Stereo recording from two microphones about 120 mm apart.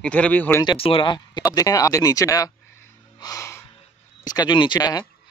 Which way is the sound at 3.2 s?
30° left (ahead or behind).